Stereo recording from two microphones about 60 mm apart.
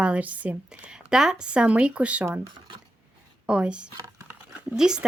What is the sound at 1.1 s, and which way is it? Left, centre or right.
Speech, centre.